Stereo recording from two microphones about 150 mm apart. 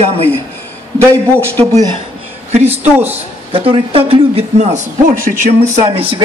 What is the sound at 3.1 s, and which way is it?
A man's voice, 40° right (ahead or behind).